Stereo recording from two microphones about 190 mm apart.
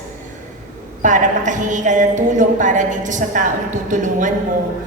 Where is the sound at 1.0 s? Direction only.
40° right (ahead or behind).